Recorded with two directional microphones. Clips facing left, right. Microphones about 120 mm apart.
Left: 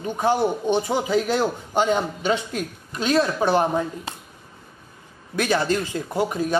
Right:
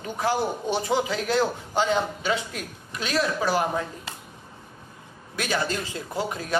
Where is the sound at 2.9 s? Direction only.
25° left (ahead or behind).